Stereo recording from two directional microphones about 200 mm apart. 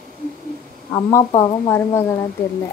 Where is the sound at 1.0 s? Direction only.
20° left (ahead or behind).